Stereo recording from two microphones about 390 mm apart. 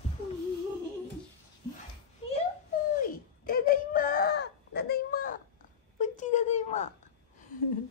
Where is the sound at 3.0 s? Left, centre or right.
Left.